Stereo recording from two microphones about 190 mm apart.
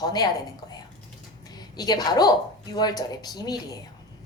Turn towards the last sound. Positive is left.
turn(degrees=20)  # may be behind; listen again after turning